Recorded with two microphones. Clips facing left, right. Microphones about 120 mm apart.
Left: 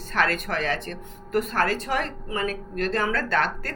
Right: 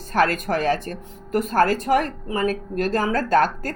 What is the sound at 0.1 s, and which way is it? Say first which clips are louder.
A woman's voice: right 5 dB; 40° right (ahead or behind).